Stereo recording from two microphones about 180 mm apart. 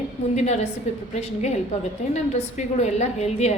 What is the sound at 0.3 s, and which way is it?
A woman's voice, 40° left (ahead or behind).